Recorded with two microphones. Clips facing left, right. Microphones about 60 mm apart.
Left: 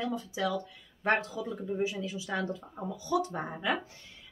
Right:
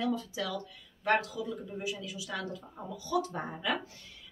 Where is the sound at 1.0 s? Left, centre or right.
Left.